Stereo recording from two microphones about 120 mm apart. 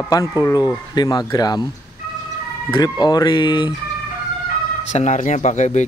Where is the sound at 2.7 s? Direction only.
35° left (ahead or behind).